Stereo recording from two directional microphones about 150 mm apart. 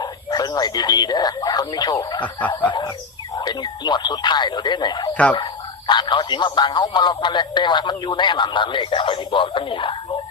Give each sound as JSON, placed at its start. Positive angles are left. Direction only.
{"t": 0.0, "sound": "a man's voice", "side_deg": 25}